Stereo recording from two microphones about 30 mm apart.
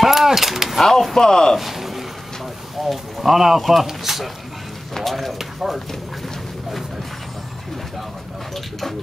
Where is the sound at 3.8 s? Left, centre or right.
Centre.